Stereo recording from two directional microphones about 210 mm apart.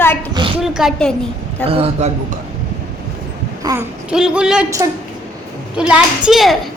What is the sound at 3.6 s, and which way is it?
Babbling, 15° right (ahead or behind).